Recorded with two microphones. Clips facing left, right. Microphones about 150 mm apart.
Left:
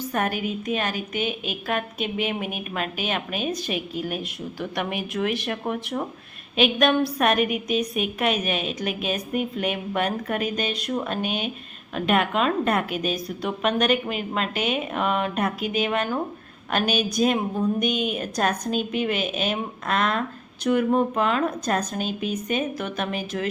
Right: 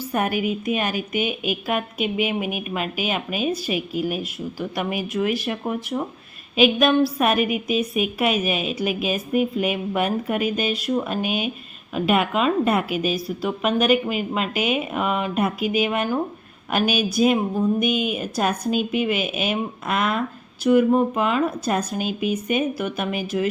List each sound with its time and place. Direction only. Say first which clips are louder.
0.0 s a woman's voice: right 3 dB; 10° right (ahead or behind)